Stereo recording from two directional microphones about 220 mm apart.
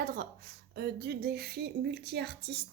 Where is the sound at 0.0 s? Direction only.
45° right (ahead or behind).